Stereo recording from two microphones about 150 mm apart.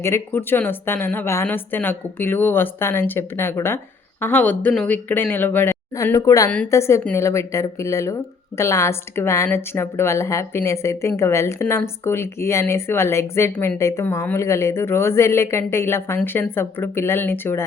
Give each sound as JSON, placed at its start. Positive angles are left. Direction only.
{"t": 0.0, "sound": "a woman's voice", "side_deg": 15}